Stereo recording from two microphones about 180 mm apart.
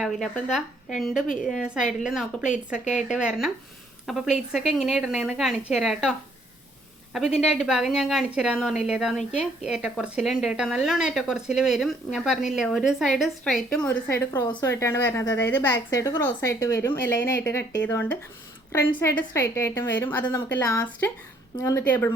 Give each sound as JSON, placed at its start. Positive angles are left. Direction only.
{"t": 0.0, "sound": "speech", "side_deg": 0}
{"t": 7.3, "sound": "a woman's voice", "side_deg": 0}